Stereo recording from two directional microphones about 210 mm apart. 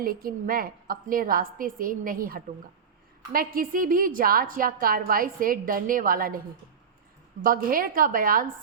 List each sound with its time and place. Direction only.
0.0 s a woman's voice: 45° right (ahead or behind)
7.4 s a woman's voice: 45° right (ahead or behind)